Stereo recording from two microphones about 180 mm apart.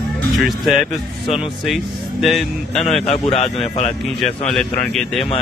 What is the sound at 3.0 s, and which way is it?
Speech, 35° left (ahead or behind).